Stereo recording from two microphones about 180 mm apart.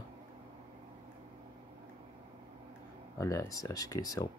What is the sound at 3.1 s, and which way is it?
Speech, 15° left (ahead or behind).